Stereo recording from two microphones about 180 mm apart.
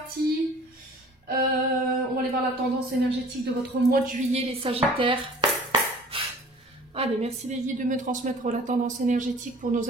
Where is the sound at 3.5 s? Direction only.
65° right (ahead or behind).